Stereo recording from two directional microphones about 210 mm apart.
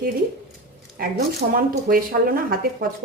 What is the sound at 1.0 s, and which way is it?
A woman's voice, 45° right (ahead or behind).